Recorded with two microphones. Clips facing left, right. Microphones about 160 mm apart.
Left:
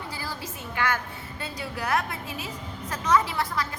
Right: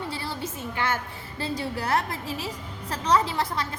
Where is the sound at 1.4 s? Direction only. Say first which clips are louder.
Right 5 dB; 30° right (ahead or behind).